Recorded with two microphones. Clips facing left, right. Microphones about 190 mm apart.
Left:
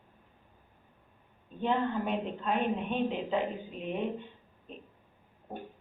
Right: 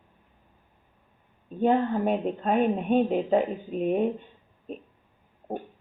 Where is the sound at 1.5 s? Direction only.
45° right (ahead or behind).